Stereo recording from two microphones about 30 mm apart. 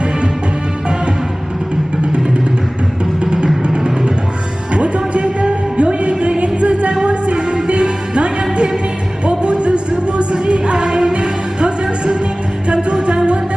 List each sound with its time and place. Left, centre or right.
4.7 s music: right